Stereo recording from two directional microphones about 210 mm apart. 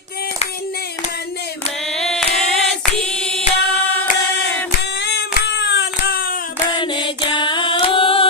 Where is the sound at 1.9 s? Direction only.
Centre (ahead or behind).